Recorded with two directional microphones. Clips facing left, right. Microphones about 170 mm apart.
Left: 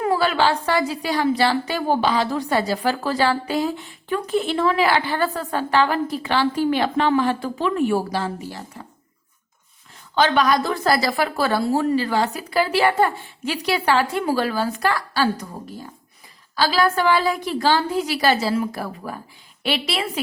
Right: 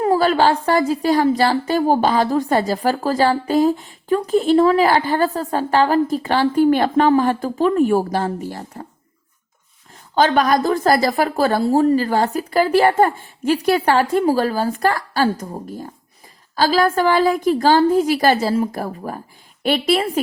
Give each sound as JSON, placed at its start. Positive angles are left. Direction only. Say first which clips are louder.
{"t": 0.0, "sound": "a woman's voice", "louder": "right 4 dB", "side_deg": -40}
{"t": 10.2, "sound": "a woman's voice", "louder": "right 3 dB", "side_deg": -45}
{"t": 16.6, "sound": "a woman's voice", "louder": "right 3 dB", "side_deg": -45}